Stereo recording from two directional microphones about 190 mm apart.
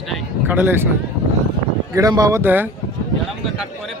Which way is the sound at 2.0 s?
20° right (ahead or behind).